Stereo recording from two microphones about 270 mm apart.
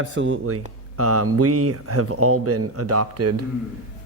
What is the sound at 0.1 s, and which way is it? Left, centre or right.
Speech, right.